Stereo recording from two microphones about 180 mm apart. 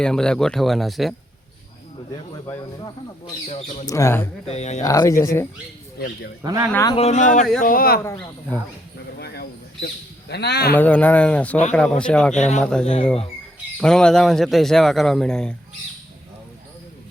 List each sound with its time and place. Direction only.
0.0 s a man's voice: 5° left (ahead or behind)
2.5 s speech: 15° left (ahead or behind)
4.4 s speech: 35° left (ahead or behind)
4.8 s speech: 20° left (ahead or behind)
6.4 s speech: 20° right (ahead or behind)
6.9 s speech: 35° left (ahead or behind); by 8.0 s 55° left (ahead or behind)
8.0 s speech: 15° left (ahead or behind)
9.1 s speech: 65° left (ahead or behind)
10.8 s a man's voice: 10° left (ahead or behind)
12.3 s speech: 40° left (ahead or behind)
12.5 s a man's voice: 5° left (ahead or behind)